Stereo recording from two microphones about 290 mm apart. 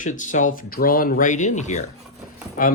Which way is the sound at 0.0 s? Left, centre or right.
Left.